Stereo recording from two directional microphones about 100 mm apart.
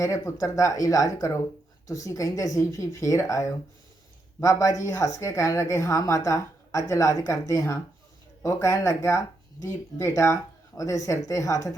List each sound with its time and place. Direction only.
0.0 s a woman's voice: 35° left (ahead or behind)